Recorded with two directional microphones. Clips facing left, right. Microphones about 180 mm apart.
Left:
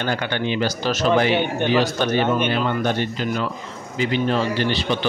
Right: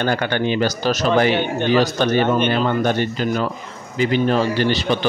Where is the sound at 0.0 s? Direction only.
50° right (ahead or behind).